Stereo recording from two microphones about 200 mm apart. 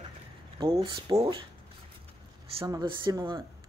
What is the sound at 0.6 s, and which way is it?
Speech, 25° right (ahead or behind).